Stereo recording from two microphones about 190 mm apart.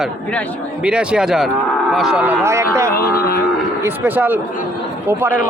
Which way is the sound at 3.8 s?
10° right (ahead or behind).